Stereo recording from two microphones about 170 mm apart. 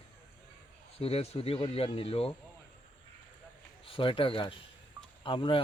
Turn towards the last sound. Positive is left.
turn(degrees=30)  # may be behind; listen again after turning